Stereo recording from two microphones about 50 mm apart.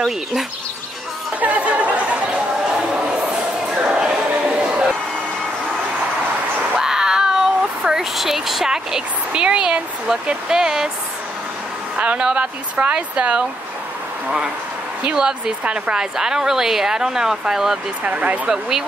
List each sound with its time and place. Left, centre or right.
1.4 s chatter: right
2.7 s a sound: centre
6.8 s speech: centre
12.0 s speech: right
15.1 s a woman's voice: centre
18.0 s speech: right
18.5 s a woman's voice: centre